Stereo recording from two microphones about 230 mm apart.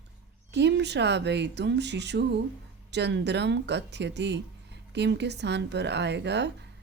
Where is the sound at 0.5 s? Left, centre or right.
Right.